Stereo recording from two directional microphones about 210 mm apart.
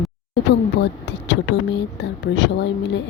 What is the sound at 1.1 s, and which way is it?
Speech, 55° left (ahead or behind).